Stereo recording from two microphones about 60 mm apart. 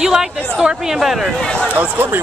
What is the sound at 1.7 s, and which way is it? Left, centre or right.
Speech, right.